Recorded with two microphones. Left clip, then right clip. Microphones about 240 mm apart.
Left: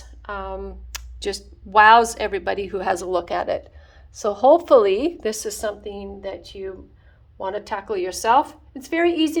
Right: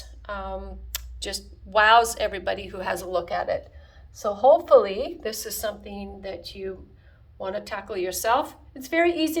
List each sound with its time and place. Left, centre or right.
0.0 s speech: centre